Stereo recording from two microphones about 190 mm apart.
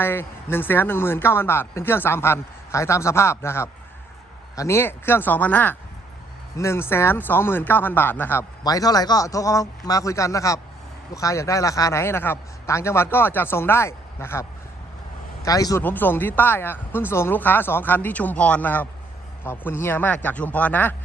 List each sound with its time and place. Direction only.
0.0 s speech: 10° left (ahead or behind)
15.4 s speech: 20° left (ahead or behind)